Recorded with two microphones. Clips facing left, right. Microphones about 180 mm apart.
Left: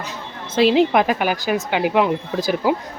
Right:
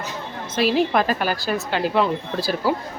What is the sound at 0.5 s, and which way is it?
A woman's voice, 20° left (ahead or behind).